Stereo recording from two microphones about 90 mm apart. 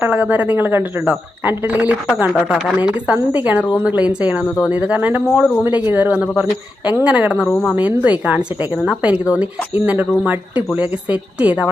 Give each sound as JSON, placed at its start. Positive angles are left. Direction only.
{"t": 0.0, "sound": "a woman's voice", "side_deg": -20}